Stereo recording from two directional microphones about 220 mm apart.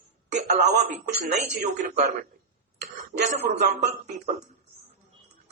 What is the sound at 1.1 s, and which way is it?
Speech, 35° right (ahead or behind).